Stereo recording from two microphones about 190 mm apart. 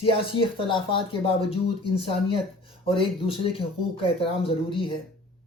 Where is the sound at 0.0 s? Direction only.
30° left (ahead or behind).